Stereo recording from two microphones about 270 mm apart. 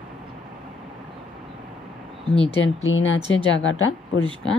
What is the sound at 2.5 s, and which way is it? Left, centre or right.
Speech, left.